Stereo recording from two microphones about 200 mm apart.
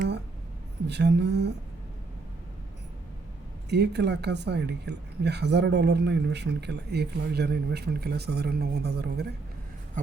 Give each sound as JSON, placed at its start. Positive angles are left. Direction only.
{"t": 0.9, "sound": "speech", "side_deg": -60}
{"t": 3.7, "sound": "speech", "side_deg": -55}